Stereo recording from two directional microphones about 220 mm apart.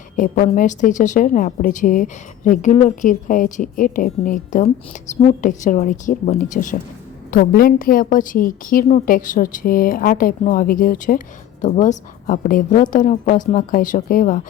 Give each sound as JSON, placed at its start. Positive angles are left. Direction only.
{"t": 0.2, "sound": "a woman's voice", "side_deg": 35}